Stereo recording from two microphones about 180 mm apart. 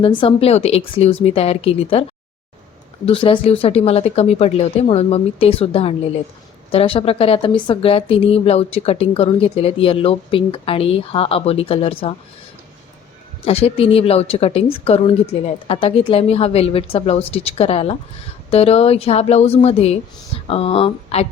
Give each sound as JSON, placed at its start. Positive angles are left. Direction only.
{"t": 0.0, "sound": "speech", "side_deg": 30}
{"t": 3.1, "sound": "speech", "side_deg": 30}
{"t": 13.4, "sound": "speech", "side_deg": 35}